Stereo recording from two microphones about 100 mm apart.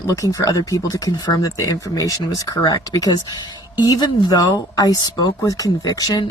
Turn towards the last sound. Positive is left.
turn(degrees=40)  # may be behind; listen again after turning